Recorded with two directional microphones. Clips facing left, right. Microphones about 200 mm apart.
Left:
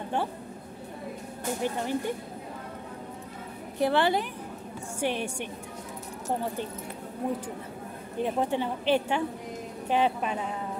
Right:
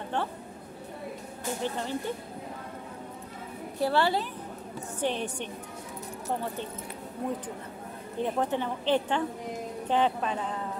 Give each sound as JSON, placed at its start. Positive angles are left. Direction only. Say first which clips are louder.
{"t": 1.6, "sound": "a woman's voice", "louder": "left 3 dB", "side_deg": 15}
{"t": 3.8, "sound": "a woman's voice", "louder": "left 2 dB", "side_deg": 20}
{"t": 8.2, "sound": "a woman's voice", "louder": "left 1 dB", "side_deg": 15}